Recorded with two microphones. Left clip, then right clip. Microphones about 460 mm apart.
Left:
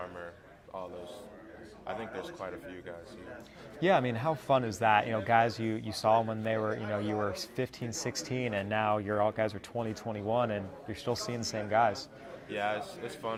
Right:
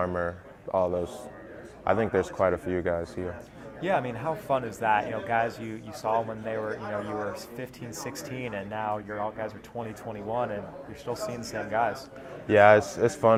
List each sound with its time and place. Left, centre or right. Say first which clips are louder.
0.0 s a man's voice: right 13 dB; right
3.8 s speech: even; left
7.6 s speech: left 2 dB; left
9.7 s speech: even; left
12.5 s a man's voice: right 16 dB; right